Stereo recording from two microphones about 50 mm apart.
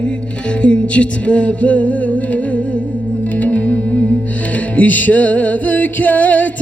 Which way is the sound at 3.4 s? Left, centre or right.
Left.